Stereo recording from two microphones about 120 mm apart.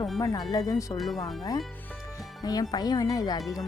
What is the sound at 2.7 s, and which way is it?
Speech, 35° left (ahead or behind).